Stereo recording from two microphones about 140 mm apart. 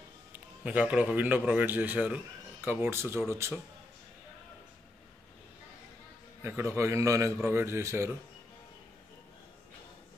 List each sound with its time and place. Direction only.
0.7 s a man's voice: 10° right (ahead or behind)
6.4 s a man's voice: 15° right (ahead or behind)